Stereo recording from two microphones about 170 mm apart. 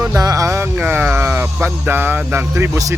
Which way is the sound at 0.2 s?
20° right (ahead or behind).